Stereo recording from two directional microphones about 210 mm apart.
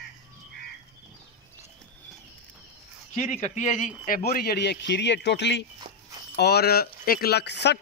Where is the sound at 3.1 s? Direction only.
30° left (ahead or behind).